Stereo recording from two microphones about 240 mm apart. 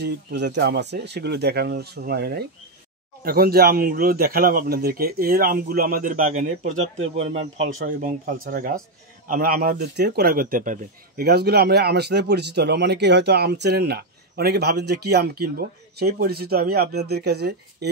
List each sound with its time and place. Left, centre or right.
0.0 s a man's voice: right
8.0 s a man's voice: right